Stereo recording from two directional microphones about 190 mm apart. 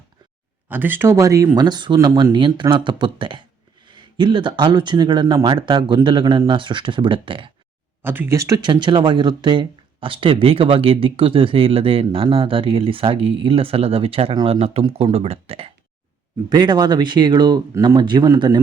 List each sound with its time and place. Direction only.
0.7 s speech: 10° right (ahead or behind); by 7.5 s 25° right (ahead or behind)
8.0 s speech: 10° right (ahead or behind)